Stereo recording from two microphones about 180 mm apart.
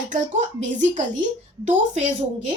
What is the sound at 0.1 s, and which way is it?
A woman's voice, 45° right (ahead or behind).